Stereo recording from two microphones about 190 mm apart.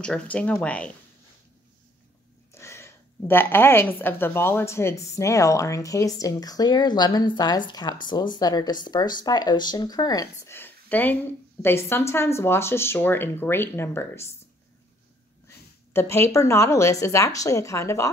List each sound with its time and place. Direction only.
0.0 s a woman's voice: 5° left (ahead or behind)
2.5 s a woman's voice: 15° left (ahead or behind)
15.4 s speech: 10° left (ahead or behind)